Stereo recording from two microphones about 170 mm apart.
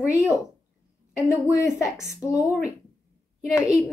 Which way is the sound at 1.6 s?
20° left (ahead or behind).